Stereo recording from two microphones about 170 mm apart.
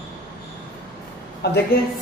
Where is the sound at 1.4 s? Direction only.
75° left (ahead or behind).